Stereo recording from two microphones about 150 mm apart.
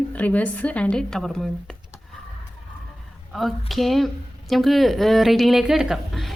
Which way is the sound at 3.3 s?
Centre (ahead or behind).